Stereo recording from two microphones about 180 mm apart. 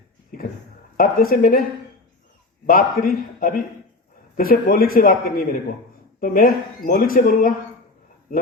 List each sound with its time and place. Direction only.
0.9 s speech: 55° left (ahead or behind)
2.6 s a man's voice: 55° left (ahead or behind)